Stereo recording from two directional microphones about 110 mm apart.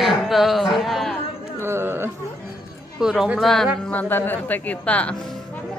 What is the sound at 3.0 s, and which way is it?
Speech, 5° right (ahead or behind).